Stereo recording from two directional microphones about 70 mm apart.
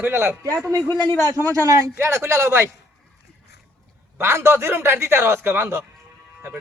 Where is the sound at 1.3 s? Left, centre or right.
Right.